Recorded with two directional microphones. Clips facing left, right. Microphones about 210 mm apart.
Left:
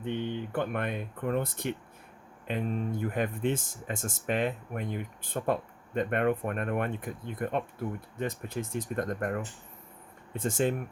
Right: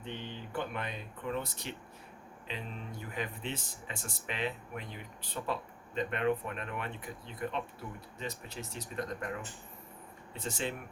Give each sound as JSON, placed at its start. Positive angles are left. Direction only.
{"t": 0.0, "sound": "speech", "side_deg": 55}